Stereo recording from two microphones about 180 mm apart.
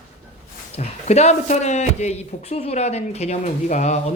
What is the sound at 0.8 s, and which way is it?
Speech, 35° left (ahead or behind).